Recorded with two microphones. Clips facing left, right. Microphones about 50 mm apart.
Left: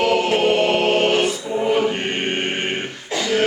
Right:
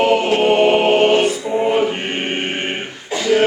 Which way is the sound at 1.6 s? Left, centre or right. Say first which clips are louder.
Right 2 dB; right.